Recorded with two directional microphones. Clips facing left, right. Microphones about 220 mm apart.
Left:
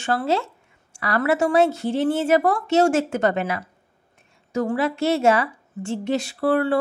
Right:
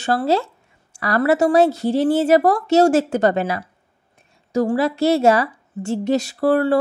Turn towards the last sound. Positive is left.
turn(degrees=-40)  # may be behind; listen again after turning